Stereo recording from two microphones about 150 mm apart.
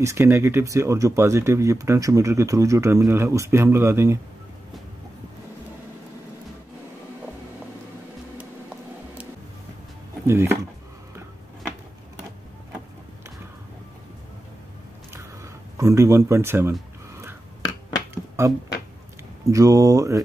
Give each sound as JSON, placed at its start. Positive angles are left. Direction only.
{"t": 0.0, "sound": "speech", "side_deg": -20}
{"t": 10.2, "sound": "speech", "side_deg": -15}
{"t": 15.8, "sound": "speech", "side_deg": -20}
{"t": 18.1, "sound": "music", "side_deg": -20}
{"t": 19.5, "sound": "speech", "side_deg": -20}